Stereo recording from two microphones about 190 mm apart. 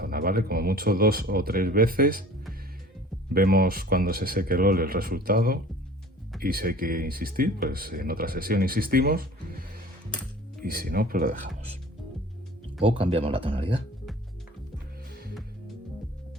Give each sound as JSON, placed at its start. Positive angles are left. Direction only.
{"t": 0.0, "sound": "speech", "side_deg": -50}
{"t": 3.3, "sound": "speech", "side_deg": -50}
{"t": 12.8, "sound": "speech", "side_deg": -30}